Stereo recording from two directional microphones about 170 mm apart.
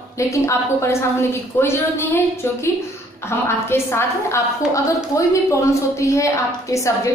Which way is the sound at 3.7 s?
15° left (ahead or behind).